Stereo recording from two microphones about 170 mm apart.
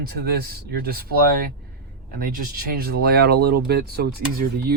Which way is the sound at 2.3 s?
65° right (ahead or behind).